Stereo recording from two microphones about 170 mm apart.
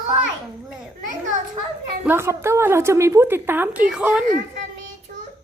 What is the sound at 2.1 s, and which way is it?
A woman's voice, 15° right (ahead or behind).